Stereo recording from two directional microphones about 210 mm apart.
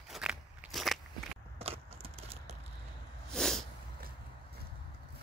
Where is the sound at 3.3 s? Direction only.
Centre (ahead or behind).